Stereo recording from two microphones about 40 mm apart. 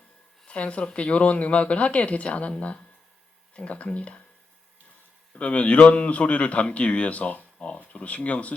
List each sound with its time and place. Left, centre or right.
0.4 s a man's voice: left
5.4 s a man's voice: left